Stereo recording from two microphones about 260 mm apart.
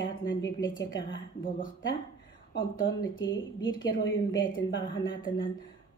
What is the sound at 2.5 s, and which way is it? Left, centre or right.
Speech, left.